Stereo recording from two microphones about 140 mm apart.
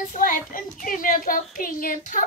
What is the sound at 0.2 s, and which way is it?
Speech, 75° left (ahead or behind).